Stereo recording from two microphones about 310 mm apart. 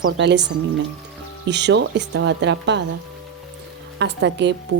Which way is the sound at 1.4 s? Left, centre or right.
Right.